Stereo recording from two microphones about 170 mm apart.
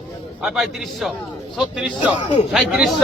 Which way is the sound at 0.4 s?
Centre (ahead or behind).